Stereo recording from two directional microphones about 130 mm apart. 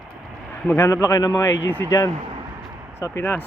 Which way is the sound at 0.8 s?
25° left (ahead or behind).